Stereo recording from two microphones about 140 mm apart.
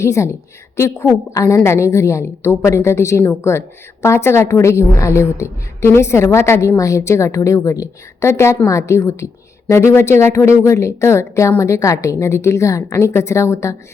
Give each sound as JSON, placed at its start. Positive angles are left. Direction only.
{"t": 0.0, "sound": "a woman's voice", "side_deg": 20}